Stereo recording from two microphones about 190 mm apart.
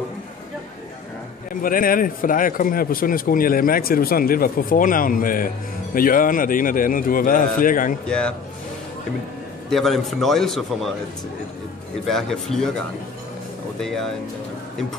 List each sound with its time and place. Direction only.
1.5 s speech: 45° left (ahead or behind)
8.1 s a man's voice: 5° left (ahead or behind)
9.7 s a man's voice: centre (ahead or behind)
12.1 s a man's voice: centre (ahead or behind)